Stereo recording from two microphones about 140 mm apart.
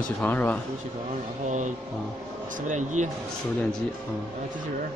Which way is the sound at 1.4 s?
60° right (ahead or behind).